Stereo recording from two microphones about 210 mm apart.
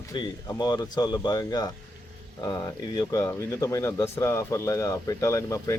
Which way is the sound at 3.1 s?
15° left (ahead or behind).